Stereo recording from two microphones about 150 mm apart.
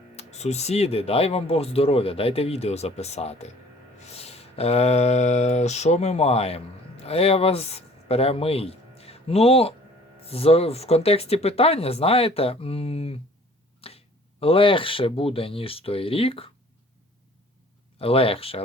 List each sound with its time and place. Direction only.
0.2 s speech: 45° left (ahead or behind)
18.0 s speech: 40° left (ahead or behind)